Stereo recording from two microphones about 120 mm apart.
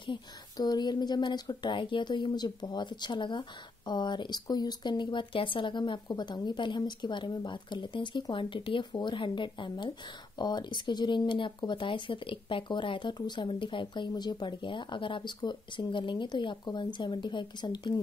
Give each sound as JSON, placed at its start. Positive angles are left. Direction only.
{"t": 0.0, "sound": "speech", "side_deg": 35}